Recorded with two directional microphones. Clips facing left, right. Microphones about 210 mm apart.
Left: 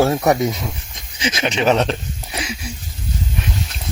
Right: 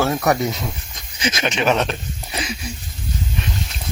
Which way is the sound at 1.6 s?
30° left (ahead or behind).